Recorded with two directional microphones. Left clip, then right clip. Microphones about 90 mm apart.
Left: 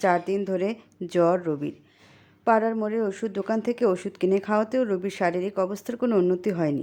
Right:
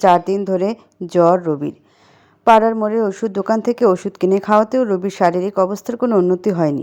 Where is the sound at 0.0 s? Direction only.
40° right (ahead or behind).